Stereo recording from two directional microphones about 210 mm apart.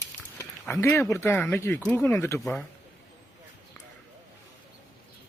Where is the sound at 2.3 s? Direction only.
Centre (ahead or behind).